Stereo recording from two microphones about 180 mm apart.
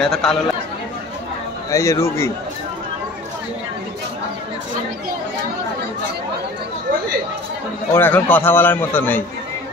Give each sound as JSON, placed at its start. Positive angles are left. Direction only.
{"t": 0.0, "sound": "speech", "side_deg": 5}
{"t": 1.7, "sound": "a man's voice", "side_deg": 15}
{"t": 7.9, "sound": "a man's voice", "side_deg": 10}